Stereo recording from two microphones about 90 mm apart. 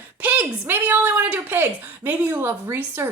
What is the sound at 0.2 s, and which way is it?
Speech, 15° right (ahead or behind).